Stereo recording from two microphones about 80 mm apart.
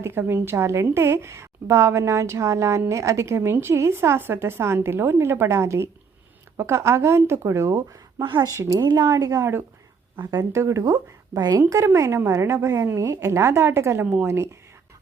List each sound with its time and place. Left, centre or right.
0.0 s a woman's voice: right
8.2 s speech: right
8.4 s speech: right
8.7 s speech: right
9.0 s speech: right
10.5 s speech: right
11.9 s a woman's voice: right